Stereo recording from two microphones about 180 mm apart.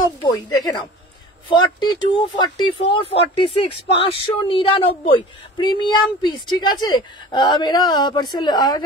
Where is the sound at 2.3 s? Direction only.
25° left (ahead or behind).